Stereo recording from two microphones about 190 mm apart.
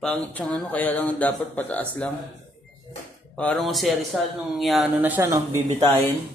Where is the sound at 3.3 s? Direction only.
5° left (ahead or behind); by 5.6 s 15° right (ahead or behind).